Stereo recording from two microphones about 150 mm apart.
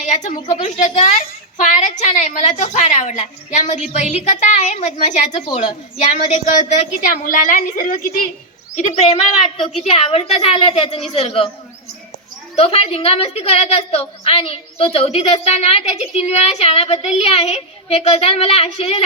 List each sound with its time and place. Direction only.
0.0 s a woman's voice: 55° left (ahead or behind)
8.7 s a woman's voice: 45° left (ahead or behind)
12.5 s a woman's voice: 40° left (ahead or behind)